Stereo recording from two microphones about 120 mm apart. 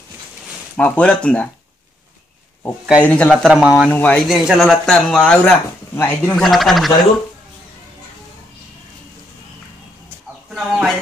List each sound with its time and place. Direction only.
0.7 s speech: 10° left (ahead or behind)
3.0 s speech: 10° left (ahead or behind)
3.4 s speech: 5° right (ahead or behind)
3.9 s speech: 10° left (ahead or behind)
4.3 s a man's voice: centre (ahead or behind); by 6.3 s 15° left (ahead or behind)
6.3 s a man's voice: centre (ahead or behind)
10.5 s a man's voice: centre (ahead or behind)